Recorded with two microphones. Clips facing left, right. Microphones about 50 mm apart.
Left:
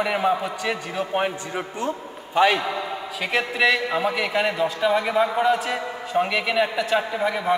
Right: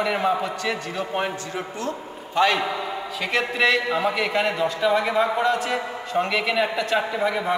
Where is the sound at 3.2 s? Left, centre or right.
Centre.